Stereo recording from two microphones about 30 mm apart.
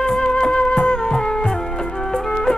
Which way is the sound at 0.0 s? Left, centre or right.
Left.